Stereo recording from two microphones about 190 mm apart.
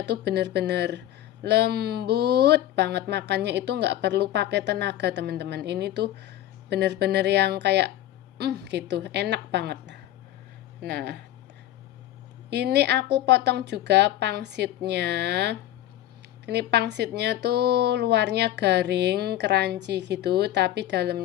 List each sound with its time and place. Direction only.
0.0 s speech: 65° right (ahead or behind)
12.5 s speech: 60° right (ahead or behind)